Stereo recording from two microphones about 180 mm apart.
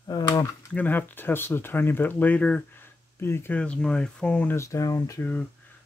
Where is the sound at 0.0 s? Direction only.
20° left (ahead or behind).